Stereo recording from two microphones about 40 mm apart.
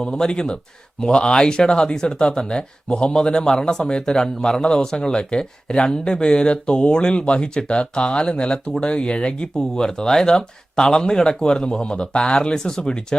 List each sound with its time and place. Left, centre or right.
0.0 s speech: centre